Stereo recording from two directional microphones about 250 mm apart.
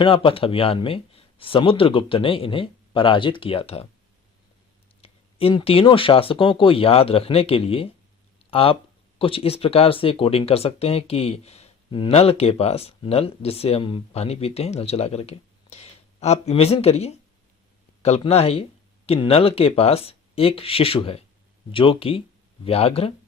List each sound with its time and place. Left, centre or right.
0.0 s speech: left
4.9 s speech: left